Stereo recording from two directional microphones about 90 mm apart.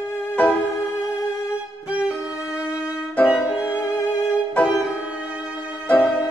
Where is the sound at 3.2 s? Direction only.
25° left (ahead or behind).